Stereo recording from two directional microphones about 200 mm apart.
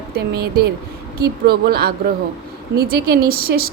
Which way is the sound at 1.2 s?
50° right (ahead or behind).